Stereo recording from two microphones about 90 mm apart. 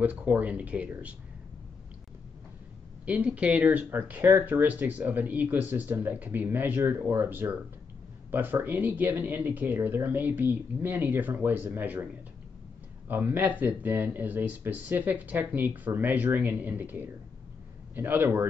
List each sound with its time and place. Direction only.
0.0 s speech: 15° right (ahead or behind)
3.1 s speech: 15° right (ahead or behind)
13.1 s speech: 20° right (ahead or behind)